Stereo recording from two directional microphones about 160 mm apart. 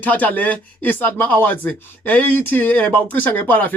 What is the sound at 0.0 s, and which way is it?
Speech, 10° left (ahead or behind).